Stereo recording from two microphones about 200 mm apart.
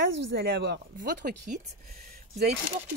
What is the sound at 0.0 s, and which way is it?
Speech, 60° right (ahead or behind).